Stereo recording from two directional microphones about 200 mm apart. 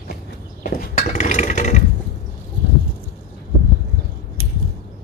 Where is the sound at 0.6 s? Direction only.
40° left (ahead or behind).